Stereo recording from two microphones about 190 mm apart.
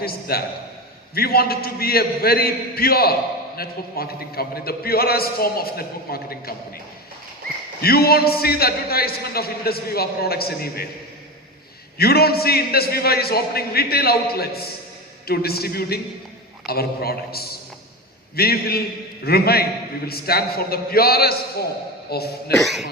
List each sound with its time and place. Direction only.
0.0 s a man's voice: 55° left (ahead or behind)
7.8 s a man's voice: 55° left (ahead or behind)
11.9 s a man's voice: 55° left (ahead or behind)
22.5 s speech: centre (ahead or behind)